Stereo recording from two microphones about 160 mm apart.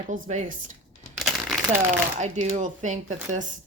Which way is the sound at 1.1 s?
Centre (ahead or behind).